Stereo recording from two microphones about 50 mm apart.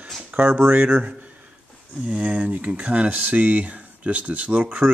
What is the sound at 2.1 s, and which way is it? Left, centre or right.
Speech, right.